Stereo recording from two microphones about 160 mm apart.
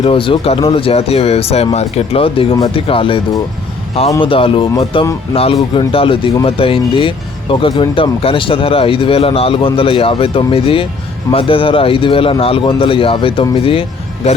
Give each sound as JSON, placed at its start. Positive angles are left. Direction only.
{"t": 0.0, "sound": "speech", "side_deg": 35}
{"t": 4.2, "sound": "speech", "side_deg": 35}